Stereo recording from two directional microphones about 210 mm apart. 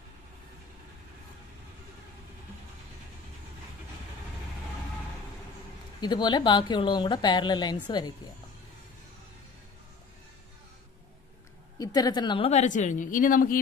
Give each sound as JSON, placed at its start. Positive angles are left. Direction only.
{"t": 5.9, "sound": "a woman's voice", "side_deg": 20}
{"t": 11.8, "sound": "a woman's voice", "side_deg": 20}